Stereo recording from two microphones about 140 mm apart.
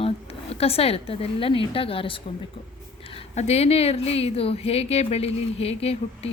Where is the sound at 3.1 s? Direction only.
50° left (ahead or behind).